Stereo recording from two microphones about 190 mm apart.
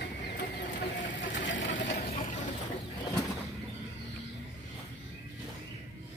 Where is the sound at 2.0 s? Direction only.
45° left (ahead or behind).